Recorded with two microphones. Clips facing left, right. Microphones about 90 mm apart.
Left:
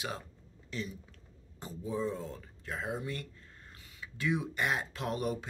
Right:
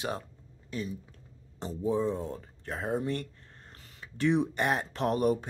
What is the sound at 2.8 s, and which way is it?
Speech, 40° right (ahead or behind).